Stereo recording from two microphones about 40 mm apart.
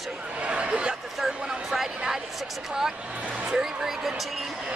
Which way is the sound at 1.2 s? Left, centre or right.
Centre.